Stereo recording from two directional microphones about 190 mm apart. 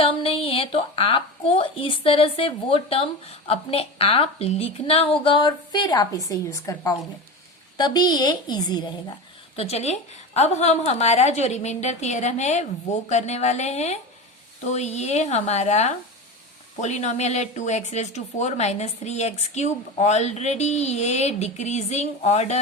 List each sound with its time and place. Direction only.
0.0 s a woman's voice: 30° left (ahead or behind)
9.6 s speech: 35° left (ahead or behind)